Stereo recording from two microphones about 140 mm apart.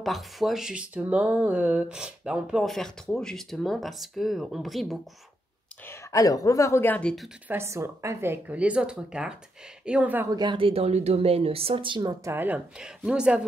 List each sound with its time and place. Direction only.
0.0 s speech: centre (ahead or behind)
5.9 s speech: 25° left (ahead or behind); by 7.2 s 5° left (ahead or behind)
7.4 s speech: 20° right (ahead or behind)
10.3 s speech: 35° right (ahead or behind)
12.3 s speech: 15° right (ahead or behind)